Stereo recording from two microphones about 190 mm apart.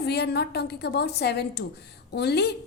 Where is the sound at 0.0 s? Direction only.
60° left (ahead or behind).